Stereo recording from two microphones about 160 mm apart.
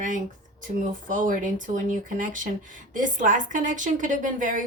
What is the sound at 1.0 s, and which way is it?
A woman's voice, 55° right (ahead or behind).